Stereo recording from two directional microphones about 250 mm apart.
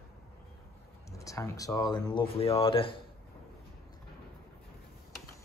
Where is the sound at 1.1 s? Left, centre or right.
Centre.